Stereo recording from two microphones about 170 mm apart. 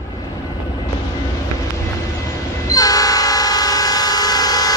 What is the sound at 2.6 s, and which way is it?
Train, 20° left (ahead or behind).